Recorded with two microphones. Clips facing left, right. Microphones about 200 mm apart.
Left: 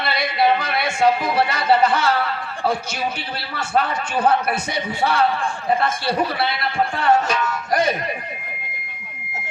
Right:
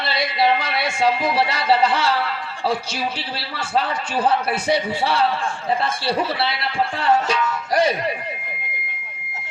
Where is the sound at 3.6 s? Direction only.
30° right (ahead or behind).